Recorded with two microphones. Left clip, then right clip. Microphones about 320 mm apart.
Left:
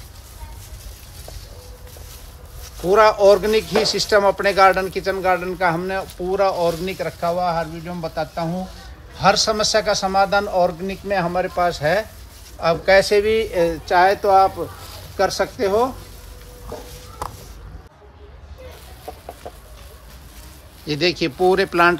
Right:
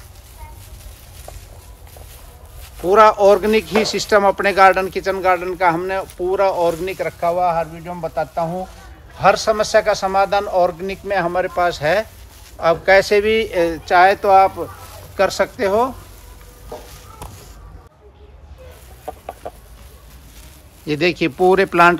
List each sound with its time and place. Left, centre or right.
2.9 s speech: right
19.4 s chicken: right
20.8 s speech: right